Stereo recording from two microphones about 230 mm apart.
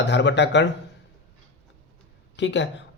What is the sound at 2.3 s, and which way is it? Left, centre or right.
Speech, left.